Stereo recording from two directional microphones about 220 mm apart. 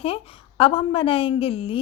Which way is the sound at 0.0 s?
25° left (ahead or behind).